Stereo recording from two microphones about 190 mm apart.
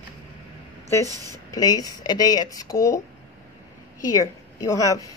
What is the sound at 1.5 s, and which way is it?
Speech, 20° left (ahead or behind).